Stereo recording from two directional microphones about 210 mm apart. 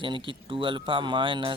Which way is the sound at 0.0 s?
25° right (ahead or behind).